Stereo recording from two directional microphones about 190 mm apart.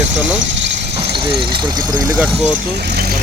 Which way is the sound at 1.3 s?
25° right (ahead or behind).